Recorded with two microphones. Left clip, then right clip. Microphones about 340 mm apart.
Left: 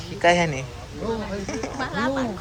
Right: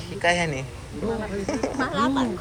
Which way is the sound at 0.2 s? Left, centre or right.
Centre.